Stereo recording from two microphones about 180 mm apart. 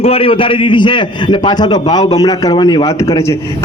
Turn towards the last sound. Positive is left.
turn(degrees=15)  # may be behind; listen again after turning